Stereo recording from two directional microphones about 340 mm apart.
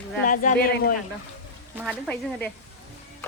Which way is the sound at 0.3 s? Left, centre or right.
Left.